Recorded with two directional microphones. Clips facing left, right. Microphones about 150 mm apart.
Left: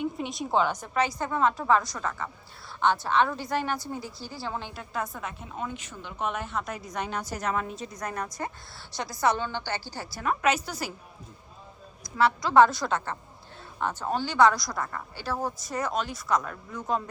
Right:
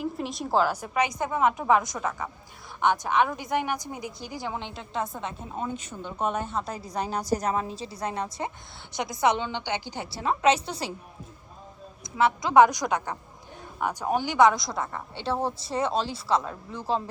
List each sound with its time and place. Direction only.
0.0 s a woman's voice: centre (ahead or behind); by 5.3 s 25° right (ahead or behind)
6.0 s a woman's voice: 40° right (ahead or behind)
12.1 s a woman's voice: 20° right (ahead or behind)